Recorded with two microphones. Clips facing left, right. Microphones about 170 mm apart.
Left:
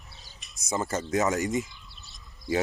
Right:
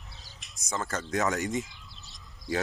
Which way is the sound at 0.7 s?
10° left (ahead or behind).